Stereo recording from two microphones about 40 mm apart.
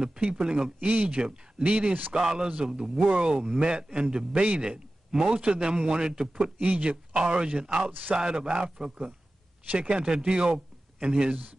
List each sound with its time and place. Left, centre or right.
0.2 s a man's voice: right
6.6 s speech: right
7.2 s speech: right
7.9 s speech: right
8.2 s a man's voice: centre